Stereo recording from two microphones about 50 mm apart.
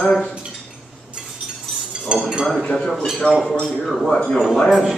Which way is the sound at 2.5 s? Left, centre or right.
Centre.